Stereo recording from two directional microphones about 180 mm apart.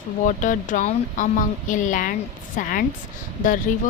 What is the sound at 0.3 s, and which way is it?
Speech, 45° left (ahead or behind).